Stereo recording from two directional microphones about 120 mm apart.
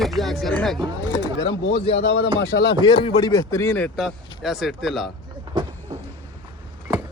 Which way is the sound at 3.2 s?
25° left (ahead or behind).